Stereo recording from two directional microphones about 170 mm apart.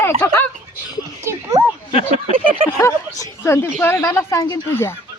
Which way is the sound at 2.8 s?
15° left (ahead or behind).